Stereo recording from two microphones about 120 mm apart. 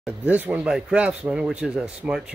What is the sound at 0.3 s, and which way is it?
Speech, 15° right (ahead or behind).